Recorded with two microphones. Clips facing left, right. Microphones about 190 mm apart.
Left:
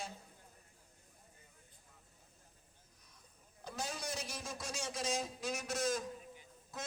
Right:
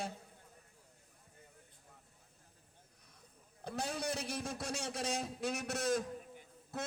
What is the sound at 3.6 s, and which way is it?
A man's voice, 60° right (ahead or behind).